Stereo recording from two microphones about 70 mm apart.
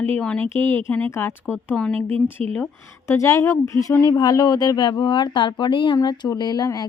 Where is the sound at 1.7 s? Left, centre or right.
Centre.